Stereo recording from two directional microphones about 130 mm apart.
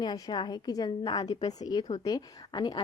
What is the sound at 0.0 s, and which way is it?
A woman's voice, 35° left (ahead or behind).